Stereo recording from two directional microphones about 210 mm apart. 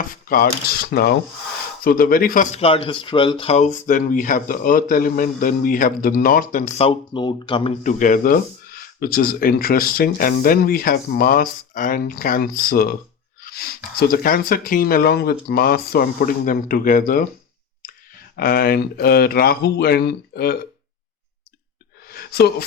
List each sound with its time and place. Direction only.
0.3 s speech: 45° left (ahead or behind)
18.3 s speech: 45° left (ahead or behind)
22.1 s a sound: 50° left (ahead or behind)